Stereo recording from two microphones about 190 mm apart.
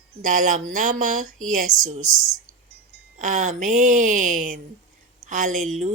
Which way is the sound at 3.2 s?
45° right (ahead or behind).